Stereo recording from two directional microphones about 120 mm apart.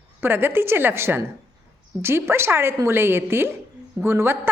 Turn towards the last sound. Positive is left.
turn(degrees=-20)  # may be behind; listen again after turning